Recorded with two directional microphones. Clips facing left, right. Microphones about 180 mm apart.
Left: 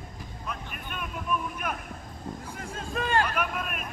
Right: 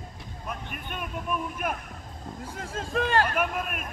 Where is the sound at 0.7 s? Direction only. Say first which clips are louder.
Right 2 dB; 45° right (ahead or behind).